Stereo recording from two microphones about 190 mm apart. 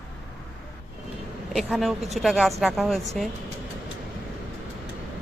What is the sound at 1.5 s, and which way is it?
Speech, centre (ahead or behind).